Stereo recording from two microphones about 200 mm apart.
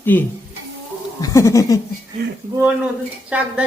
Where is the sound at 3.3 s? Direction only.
5° right (ahead or behind).